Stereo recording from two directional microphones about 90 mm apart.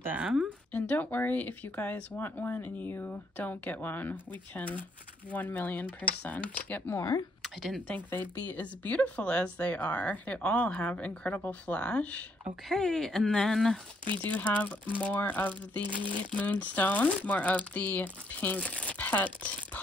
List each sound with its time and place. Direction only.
0.2 s speech: 10° right (ahead or behind)
0.7 s speech: 20° left (ahead or behind)
7.4 s speech: centre (ahead or behind)
7.9 s speech: 20° left (ahead or behind); by 13.7 s 5° left (ahead or behind)
14.3 s speech: 15° left (ahead or behind)